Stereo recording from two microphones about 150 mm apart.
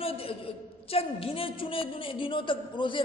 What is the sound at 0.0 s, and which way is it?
A man's voice, 40° left (ahead or behind).